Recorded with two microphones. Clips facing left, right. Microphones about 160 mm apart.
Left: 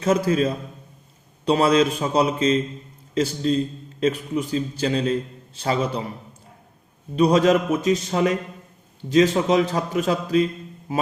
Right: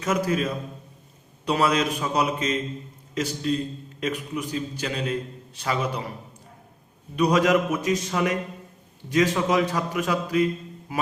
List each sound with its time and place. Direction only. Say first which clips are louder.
0.0 s a man's voice: left 5 dB; 30° left (ahead or behind)
7.2 s a man's voice: left 3 dB; 30° left (ahead or behind)